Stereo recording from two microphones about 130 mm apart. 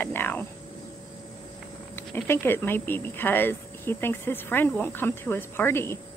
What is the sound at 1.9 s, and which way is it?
Speech, 15° left (ahead or behind).